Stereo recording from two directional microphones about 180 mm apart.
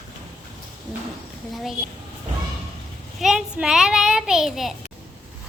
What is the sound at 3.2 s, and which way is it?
A child's voice, 5° right (ahead or behind).